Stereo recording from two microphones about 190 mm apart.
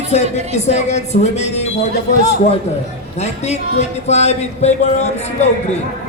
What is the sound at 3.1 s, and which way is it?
Speech, 35° left (ahead or behind).